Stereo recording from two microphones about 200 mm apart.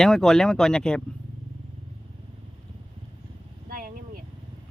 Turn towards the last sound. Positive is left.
turn(degrees=-45)  # may be behind; listen again after turning